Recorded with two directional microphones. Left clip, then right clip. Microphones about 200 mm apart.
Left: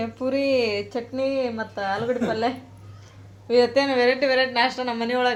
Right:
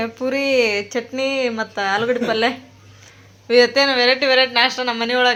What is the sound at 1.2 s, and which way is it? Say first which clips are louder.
Speech: right 4 dB; 30° right (ahead or behind).